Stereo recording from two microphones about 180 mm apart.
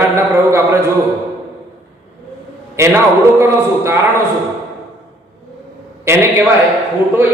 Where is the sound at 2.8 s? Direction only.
15° right (ahead or behind).